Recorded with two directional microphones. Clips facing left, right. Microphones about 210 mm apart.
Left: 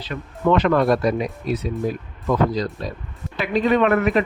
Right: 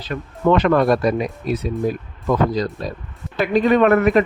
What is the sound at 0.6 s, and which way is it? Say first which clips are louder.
Speech: right 2 dB; 55° right (ahead or behind).